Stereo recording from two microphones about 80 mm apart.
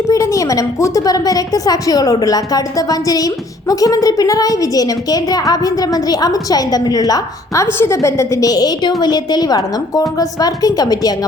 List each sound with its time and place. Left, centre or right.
0.1 s a woman's voice: left
7.7 s a woman's voice: left